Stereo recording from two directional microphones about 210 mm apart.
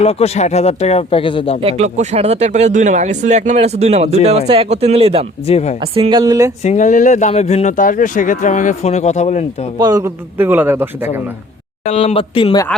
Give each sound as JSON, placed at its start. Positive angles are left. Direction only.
{"t": 0.0, "sound": "speech", "side_deg": 30}
{"t": 1.6, "sound": "speech", "side_deg": -30}
{"t": 5.5, "sound": "speech", "side_deg": 30}
{"t": 5.8, "sound": "speech", "side_deg": -25}
{"t": 6.6, "sound": "speech", "side_deg": 35}
{"t": 9.7, "sound": "a man's voice", "side_deg": -15}
{"t": 11.9, "sound": "speech", "side_deg": 30}